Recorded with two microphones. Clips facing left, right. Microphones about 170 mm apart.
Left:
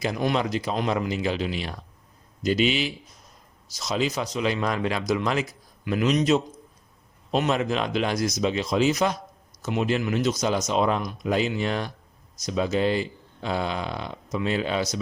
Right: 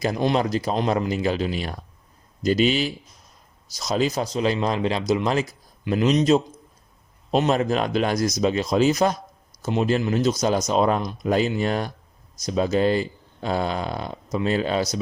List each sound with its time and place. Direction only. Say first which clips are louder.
0.0 s speech: right 3 dB; 35° right (ahead or behind)